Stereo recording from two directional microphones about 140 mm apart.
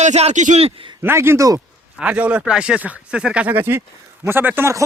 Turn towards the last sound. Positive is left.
turn(degrees=-15)  # may be behind; listen again after turning